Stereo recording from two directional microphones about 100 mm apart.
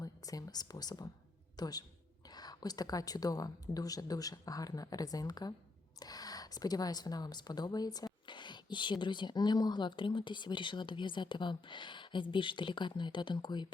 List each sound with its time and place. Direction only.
0.0 s a woman's voice: 35° left (ahead or behind)